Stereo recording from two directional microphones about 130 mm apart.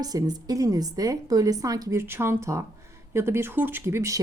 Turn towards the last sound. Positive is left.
turn(degrees=-20)  # may be behind; listen again after turning